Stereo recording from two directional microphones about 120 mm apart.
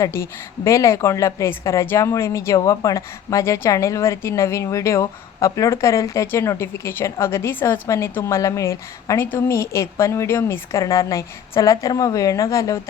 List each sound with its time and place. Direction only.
0.0 s a woman's voice: 25° left (ahead or behind)